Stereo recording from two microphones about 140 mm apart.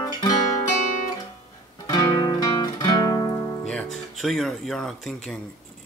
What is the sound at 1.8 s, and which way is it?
Guitar, 30° left (ahead or behind).